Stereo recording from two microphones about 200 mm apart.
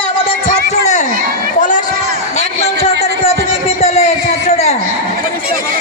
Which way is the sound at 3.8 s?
35° left (ahead or behind).